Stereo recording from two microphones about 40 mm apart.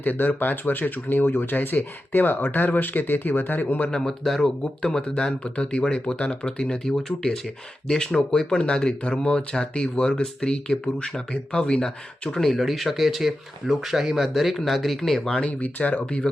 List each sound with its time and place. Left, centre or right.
0.0 s speech: left
3.8 s speech: centre
5.0 s speech: left
7.9 s speech: left
15.4 s speech: left
16.0 s speech: left